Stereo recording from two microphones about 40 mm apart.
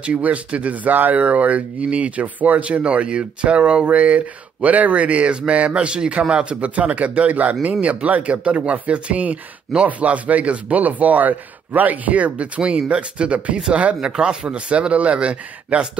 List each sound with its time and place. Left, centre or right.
0.0 s a man's voice: right
14.0 s a man's voice: right